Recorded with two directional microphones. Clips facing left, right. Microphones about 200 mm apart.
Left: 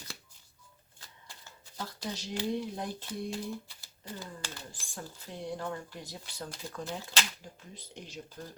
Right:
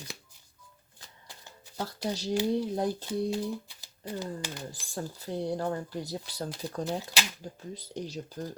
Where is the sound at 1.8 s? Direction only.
35° right (ahead or behind).